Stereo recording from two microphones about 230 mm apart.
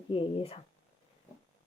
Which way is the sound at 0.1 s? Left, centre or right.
Left.